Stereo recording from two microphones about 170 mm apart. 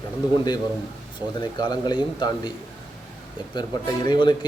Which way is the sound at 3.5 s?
25° left (ahead or behind).